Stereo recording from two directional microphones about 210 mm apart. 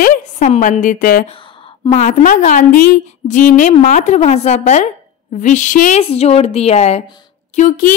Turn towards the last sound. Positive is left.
turn(degrees=40)  # may be behind; listen again after turning